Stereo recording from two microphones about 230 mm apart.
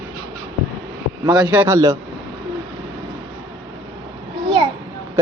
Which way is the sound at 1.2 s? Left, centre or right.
Centre.